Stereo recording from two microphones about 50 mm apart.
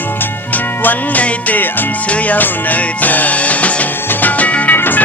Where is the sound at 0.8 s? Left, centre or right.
Left.